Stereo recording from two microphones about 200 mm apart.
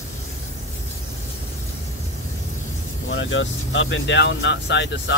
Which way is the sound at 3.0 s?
70° left (ahead or behind).